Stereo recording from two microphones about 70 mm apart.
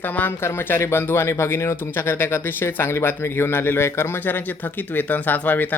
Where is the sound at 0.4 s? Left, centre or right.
Left.